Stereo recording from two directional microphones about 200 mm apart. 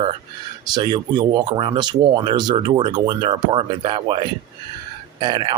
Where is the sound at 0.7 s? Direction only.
20° right (ahead or behind).